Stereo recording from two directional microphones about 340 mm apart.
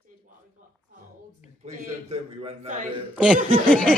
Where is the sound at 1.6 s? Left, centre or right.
Centre.